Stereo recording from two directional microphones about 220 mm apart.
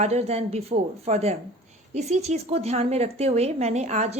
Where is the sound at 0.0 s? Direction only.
30° right (ahead or behind).